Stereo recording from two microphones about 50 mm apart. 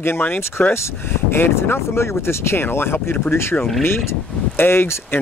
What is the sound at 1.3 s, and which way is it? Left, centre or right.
Speech, left.